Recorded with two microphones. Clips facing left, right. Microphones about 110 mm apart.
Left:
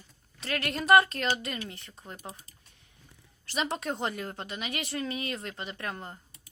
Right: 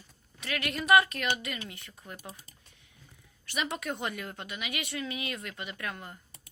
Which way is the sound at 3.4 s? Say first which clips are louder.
Left 2 dB; 35° left (ahead or behind).